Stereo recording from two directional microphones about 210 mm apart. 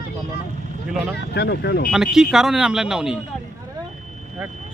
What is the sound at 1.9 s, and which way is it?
Speech, centre (ahead or behind).